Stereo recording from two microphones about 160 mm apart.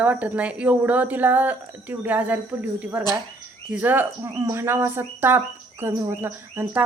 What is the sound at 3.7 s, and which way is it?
Speech, 10° right (ahead or behind).